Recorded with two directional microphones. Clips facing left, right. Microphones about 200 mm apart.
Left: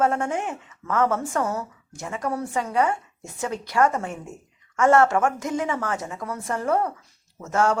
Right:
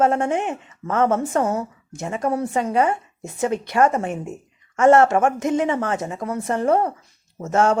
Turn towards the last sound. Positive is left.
turn(degrees=-25)  # may be behind; listen again after turning